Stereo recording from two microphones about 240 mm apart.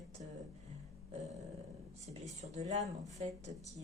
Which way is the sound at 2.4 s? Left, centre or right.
Right.